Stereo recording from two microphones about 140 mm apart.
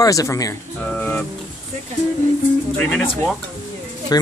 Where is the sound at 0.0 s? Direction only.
25° left (ahead or behind).